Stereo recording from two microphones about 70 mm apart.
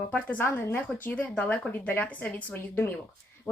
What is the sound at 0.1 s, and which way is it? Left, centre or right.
Speech, left.